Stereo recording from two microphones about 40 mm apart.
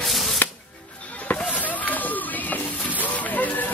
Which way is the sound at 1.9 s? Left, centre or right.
Left.